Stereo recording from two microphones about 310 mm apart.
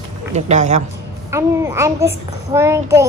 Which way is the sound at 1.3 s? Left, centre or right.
Centre.